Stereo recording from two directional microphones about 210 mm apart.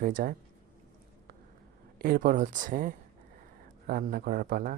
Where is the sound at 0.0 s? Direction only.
40° right (ahead or behind).